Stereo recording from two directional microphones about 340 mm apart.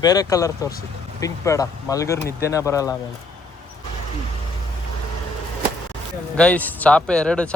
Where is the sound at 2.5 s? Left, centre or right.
Centre.